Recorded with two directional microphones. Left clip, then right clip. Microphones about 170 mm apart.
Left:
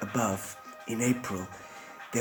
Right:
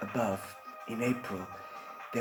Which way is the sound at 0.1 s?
30° left (ahead or behind).